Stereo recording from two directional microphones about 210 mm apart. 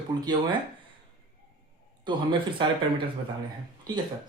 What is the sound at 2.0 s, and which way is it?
Speech, 20° right (ahead or behind).